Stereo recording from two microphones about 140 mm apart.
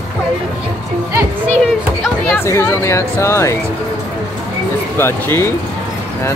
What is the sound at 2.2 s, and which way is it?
Speech, 20° left (ahead or behind).